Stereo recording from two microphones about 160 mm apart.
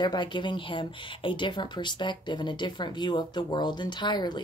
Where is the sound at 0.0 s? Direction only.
30° left (ahead or behind).